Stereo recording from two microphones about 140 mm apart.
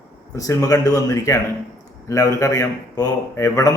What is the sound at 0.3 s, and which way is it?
A man's voice, 25° left (ahead or behind).